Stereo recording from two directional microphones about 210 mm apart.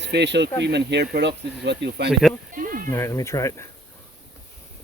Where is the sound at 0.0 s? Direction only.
55° right (ahead or behind).